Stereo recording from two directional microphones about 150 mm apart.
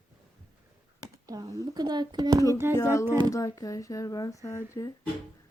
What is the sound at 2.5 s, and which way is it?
Speech, 15° right (ahead or behind).